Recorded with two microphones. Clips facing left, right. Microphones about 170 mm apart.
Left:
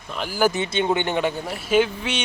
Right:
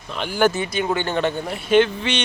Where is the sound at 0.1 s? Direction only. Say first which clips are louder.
Right 2 dB; 5° left (ahead or behind).